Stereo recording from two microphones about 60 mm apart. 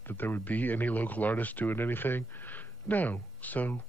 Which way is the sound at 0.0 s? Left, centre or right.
Left.